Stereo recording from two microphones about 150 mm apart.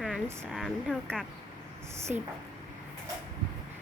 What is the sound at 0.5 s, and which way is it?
Speech, centre (ahead or behind).